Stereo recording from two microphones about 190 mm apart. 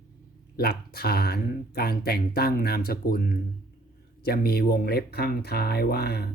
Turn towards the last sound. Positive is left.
turn(degrees=55)  # may be behind; listen again after turning